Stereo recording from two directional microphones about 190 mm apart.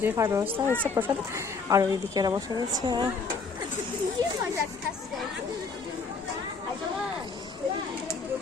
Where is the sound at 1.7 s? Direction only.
20° right (ahead or behind).